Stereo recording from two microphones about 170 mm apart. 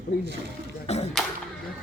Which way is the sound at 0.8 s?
40° left (ahead or behind).